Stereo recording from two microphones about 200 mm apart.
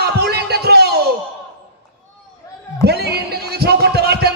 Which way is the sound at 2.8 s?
55° right (ahead or behind).